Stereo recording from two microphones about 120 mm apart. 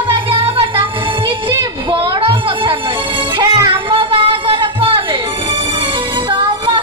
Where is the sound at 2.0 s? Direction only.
45° right (ahead or behind).